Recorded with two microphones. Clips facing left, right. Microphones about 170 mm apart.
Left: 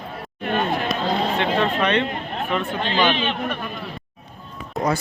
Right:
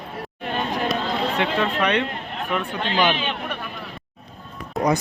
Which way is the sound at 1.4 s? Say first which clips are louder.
Left 1 dB; 10° right (ahead or behind).